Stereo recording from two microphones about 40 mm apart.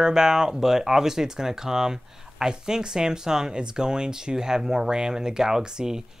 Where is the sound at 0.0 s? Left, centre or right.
Centre.